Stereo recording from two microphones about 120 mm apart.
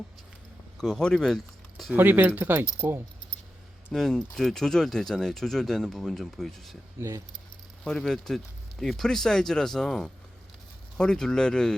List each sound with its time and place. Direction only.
0.8 s speech: 5° left (ahead or behind)
1.9 s speech: 15° right (ahead or behind)
3.9 s speech: 5° left (ahead or behind)
7.9 s speech: 5° left (ahead or behind)